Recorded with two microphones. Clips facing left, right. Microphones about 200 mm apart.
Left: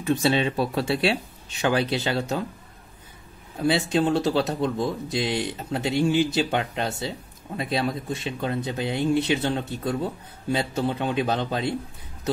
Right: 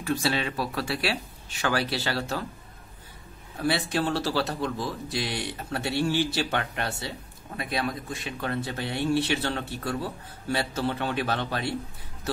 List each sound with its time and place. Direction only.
0.0 s speech: 20° left (ahead or behind)
3.5 s speech: 20° left (ahead or behind)